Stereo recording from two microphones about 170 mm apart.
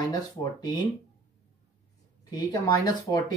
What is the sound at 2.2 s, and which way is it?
Speech, 20° left (ahead or behind).